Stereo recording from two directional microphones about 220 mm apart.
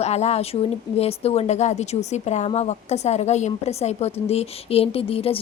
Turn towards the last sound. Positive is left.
turn(degrees=25)  # may be behind; listen again after turning